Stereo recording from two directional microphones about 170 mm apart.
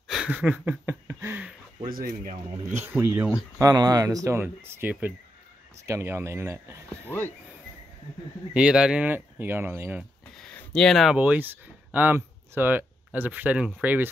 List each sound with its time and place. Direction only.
0.1 s a sound: 5° right (ahead or behind)
1.9 s speech: 55° right (ahead or behind)
2.7 s speech: 15° right (ahead or behind)
8.5 s speech: 5° right (ahead or behind)
10.3 s a sound: 5° left (ahead or behind)
11.1 s speech: 10° right (ahead or behind)